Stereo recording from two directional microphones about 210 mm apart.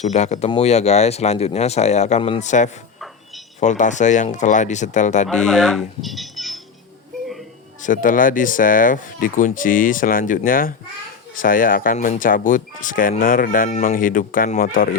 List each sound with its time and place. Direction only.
0.0 s speech: 35° left (ahead or behind)
5.5 s speech: centre (ahead or behind)
7.8 s speech: 40° left (ahead or behind)